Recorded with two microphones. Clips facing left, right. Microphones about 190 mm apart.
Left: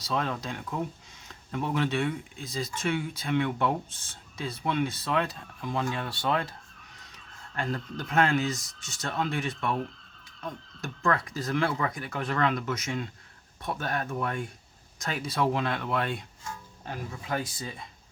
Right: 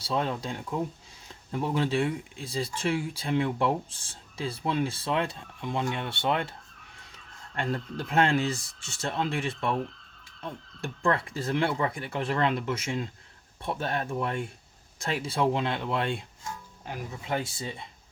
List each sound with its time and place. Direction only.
0.0 s speech: 25° right (ahead or behind)
7.5 s speech: 30° right (ahead or behind)
16.8 s speech: 15° right (ahead or behind)
17.2 s speech: 25° right (ahead or behind)